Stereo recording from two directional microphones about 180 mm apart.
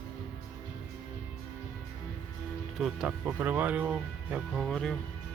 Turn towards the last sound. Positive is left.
turn(degrees=5)  # may be behind; listen again after turning